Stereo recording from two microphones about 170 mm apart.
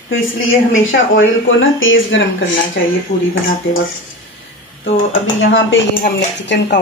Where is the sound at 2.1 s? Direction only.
90° left.